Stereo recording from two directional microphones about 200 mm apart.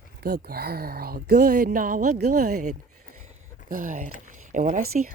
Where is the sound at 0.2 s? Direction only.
50° right (ahead or behind).